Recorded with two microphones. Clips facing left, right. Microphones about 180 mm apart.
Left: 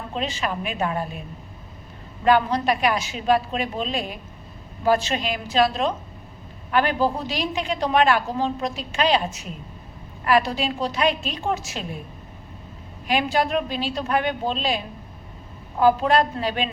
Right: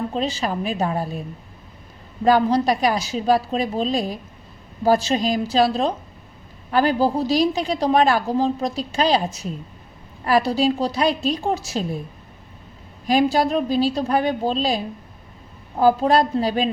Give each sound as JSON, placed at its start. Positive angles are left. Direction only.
{"t": 0.1, "sound": "a woman's voice", "side_deg": -35}
{"t": 2.2, "sound": "a woman's voice", "side_deg": -35}
{"t": 13.1, "sound": "a woman's voice", "side_deg": -35}
{"t": 15.8, "sound": "a woman's voice", "side_deg": -35}